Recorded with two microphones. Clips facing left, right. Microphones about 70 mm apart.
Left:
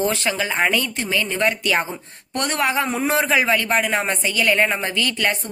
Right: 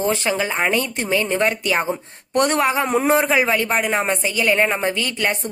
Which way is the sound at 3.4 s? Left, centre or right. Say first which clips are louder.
Even; right.